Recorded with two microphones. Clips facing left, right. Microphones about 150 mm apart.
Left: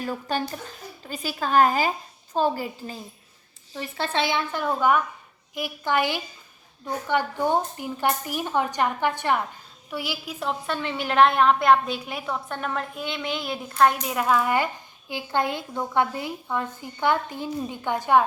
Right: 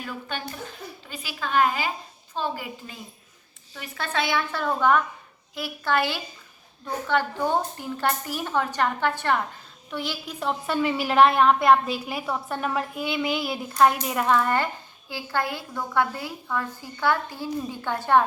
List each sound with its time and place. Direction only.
0.0 s a woman's voice: 40° left (ahead or behind)
3.8 s a woman's voice: 30° left (ahead or behind); by 14.7 s 10° left (ahead or behind)
15.1 s a woman's voice: 20° left (ahead or behind)